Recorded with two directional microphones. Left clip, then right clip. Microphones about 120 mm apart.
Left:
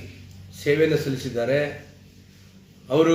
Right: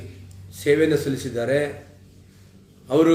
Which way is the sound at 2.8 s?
15° right (ahead or behind).